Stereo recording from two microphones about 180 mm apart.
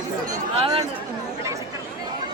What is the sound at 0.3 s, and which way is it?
Chatter, 30° right (ahead or behind).